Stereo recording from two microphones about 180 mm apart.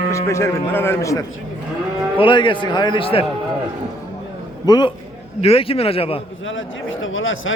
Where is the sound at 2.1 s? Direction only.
25° left (ahead or behind).